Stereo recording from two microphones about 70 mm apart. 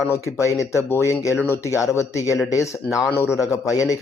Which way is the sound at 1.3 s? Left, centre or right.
Left.